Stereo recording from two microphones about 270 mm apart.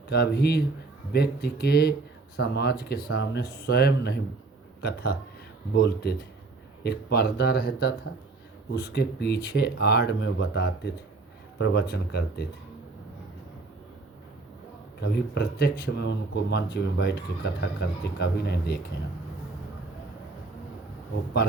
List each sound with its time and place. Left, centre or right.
0.1 s speech: left
15.0 s speech: left